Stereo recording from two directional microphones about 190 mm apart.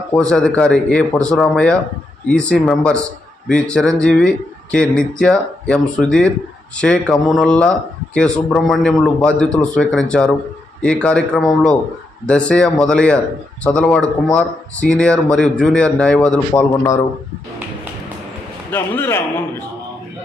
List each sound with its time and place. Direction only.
0.1 s a man's voice: 5° left (ahead or behind)
16.6 s a man's voice: 15° left (ahead or behind)
18.7 s a man's voice: 10° left (ahead or behind)